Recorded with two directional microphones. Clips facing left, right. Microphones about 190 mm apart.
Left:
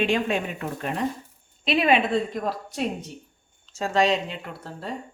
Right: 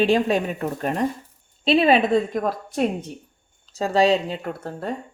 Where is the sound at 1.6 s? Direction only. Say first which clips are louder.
Right 4 dB; 30° right (ahead or behind); by 3.1 s 50° right (ahead or behind).